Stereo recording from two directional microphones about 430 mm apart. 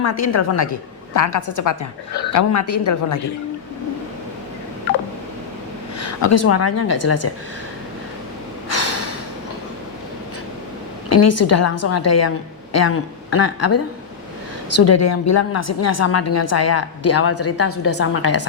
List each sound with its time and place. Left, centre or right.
0.0 s a woman's voice: left
6.0 s a woman's voice: left
8.7 s a sound: left
11.1 s a woman's voice: left